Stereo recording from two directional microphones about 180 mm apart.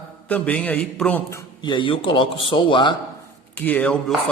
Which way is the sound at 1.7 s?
30° left (ahead or behind).